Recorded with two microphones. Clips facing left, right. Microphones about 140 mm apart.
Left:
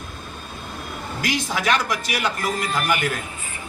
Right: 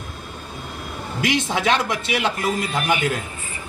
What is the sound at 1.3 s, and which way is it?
Speech, 25° right (ahead or behind).